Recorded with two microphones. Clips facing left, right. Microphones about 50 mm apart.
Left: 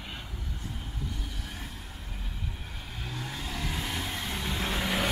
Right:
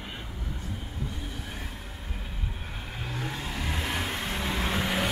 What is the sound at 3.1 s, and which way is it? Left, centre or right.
Vehicle, right.